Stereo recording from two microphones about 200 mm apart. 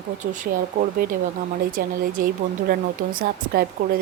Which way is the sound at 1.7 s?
40° right (ahead or behind).